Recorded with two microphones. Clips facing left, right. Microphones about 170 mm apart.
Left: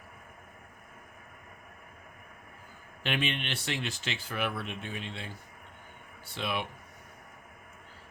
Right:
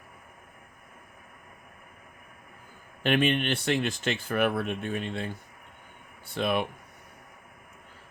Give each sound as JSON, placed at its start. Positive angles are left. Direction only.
{"t": 3.0, "sound": "speech", "side_deg": -50}
{"t": 6.3, "sound": "speech", "side_deg": -50}